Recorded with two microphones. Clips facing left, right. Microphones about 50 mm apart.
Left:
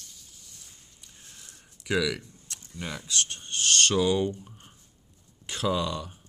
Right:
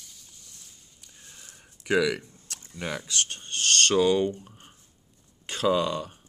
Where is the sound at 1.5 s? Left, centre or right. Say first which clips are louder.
Right 3 dB; right.